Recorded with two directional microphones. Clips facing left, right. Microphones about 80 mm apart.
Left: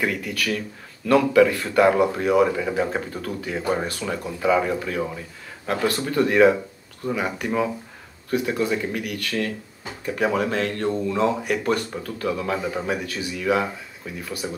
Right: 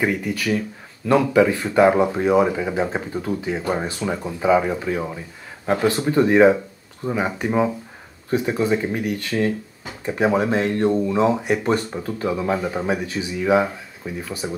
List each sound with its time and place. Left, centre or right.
0.0 s speech: centre